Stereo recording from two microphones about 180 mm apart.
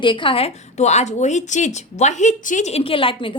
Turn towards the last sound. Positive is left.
turn(degrees=30)  # may be behind; listen again after turning